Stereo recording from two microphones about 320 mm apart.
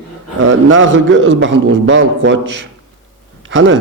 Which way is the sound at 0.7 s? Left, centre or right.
Right.